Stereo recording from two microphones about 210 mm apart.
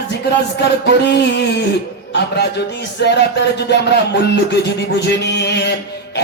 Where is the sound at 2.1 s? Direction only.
55° left (ahead or behind).